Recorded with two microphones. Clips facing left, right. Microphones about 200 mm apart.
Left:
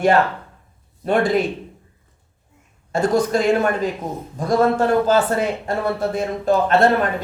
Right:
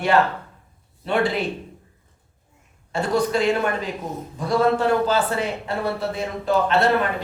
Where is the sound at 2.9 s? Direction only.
45° left (ahead or behind).